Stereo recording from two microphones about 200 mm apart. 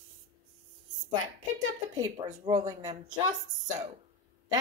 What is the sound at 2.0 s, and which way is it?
Child singing, 20° right (ahead or behind).